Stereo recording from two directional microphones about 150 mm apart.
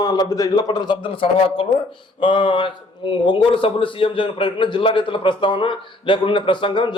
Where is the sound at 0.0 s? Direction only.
25° left (ahead or behind).